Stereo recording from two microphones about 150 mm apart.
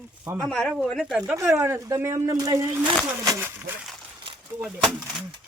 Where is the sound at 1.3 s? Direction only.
15° right (ahead or behind).